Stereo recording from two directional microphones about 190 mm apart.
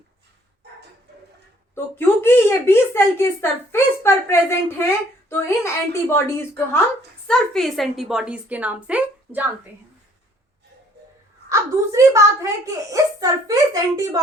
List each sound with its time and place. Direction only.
0.6 s dog: 60° right (ahead or behind)
1.7 s a woman's voice: 10° left (ahead or behind)
7.3 s a woman's voice: centre (ahead or behind)
11.4 s a woman's voice: 15° right (ahead or behind)